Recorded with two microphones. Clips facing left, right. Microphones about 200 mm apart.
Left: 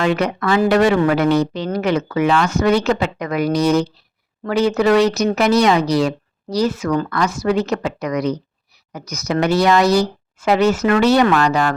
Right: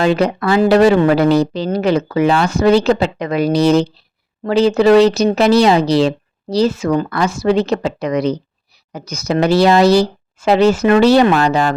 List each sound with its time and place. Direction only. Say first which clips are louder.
0.0 s speech: right 4 dB; 30° right (ahead or behind)